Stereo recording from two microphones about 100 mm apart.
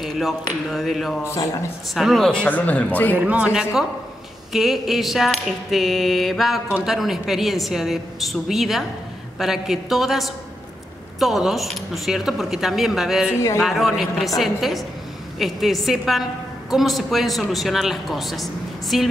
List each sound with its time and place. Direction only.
0.0 s a sound: centre (ahead or behind)
0.7 s a man's voice: centre (ahead or behind)
1.2 s speech: 35° left (ahead or behind)
2.0 s a man's voice: centre (ahead or behind)
2.4 s speech: 15° left (ahead or behind)
3.2 s speech: 15° right (ahead or behind)
4.5 s a man's voice: 5° right (ahead or behind)